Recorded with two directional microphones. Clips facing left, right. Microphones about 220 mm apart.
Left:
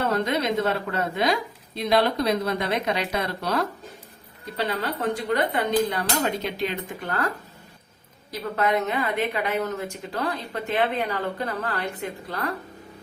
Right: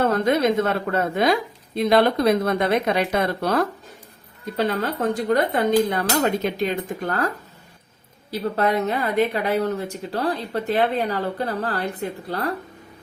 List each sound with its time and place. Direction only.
0.0 s a woman's voice: 50° right (ahead or behind)
8.3 s a woman's voice: 35° right (ahead or behind)